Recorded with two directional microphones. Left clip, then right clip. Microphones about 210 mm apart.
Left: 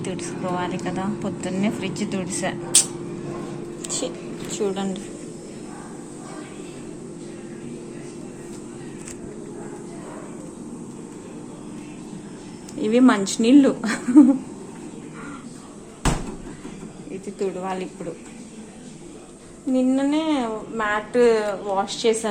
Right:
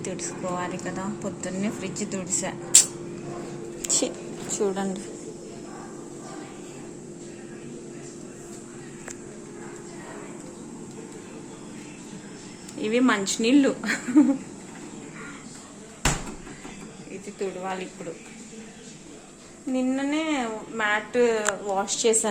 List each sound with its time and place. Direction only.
0.0 s speech: 10° right (ahead or behind)
3.8 s speech: 30° right (ahead or behind)
4.4 s speech: 20° right (ahead or behind)
12.8 s speech: 5° left (ahead or behind)
17.4 s speech: 5° left (ahead or behind)
19.7 s speech: centre (ahead or behind); by 22.3 s 15° right (ahead or behind)